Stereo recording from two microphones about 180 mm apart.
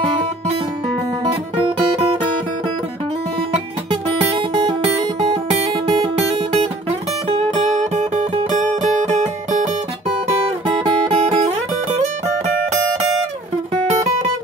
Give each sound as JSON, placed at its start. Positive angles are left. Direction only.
{"t": 4.4, "sound": "music", "side_deg": -25}
{"t": 6.6, "sound": "music", "side_deg": -35}
{"t": 11.2, "sound": "music", "side_deg": -35}